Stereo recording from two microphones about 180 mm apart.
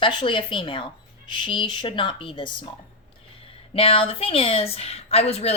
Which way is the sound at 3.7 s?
30° left (ahead or behind).